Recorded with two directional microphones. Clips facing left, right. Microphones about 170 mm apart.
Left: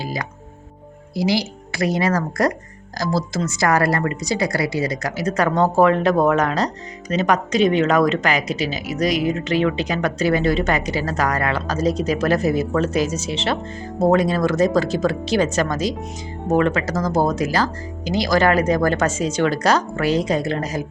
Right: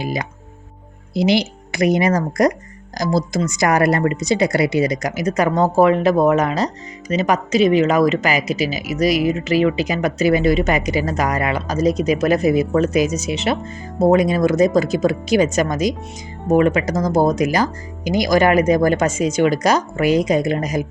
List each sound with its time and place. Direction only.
0.0 s speech: 20° right (ahead or behind)